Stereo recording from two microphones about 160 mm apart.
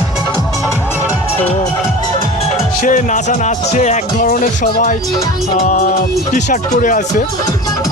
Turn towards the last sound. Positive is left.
turn(degrees=50)  # may be behind; listen again after turning